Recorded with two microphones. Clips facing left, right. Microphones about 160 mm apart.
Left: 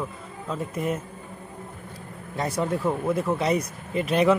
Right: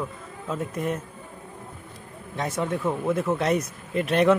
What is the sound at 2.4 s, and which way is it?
Speech, centre (ahead or behind).